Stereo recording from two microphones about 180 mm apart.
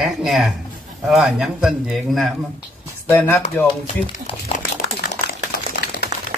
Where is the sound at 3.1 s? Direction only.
15° left (ahead or behind).